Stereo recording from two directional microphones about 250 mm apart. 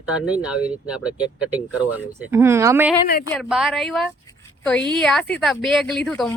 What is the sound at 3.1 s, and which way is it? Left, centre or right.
Speech, left.